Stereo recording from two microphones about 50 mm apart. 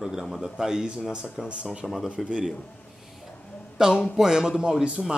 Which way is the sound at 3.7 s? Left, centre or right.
Centre.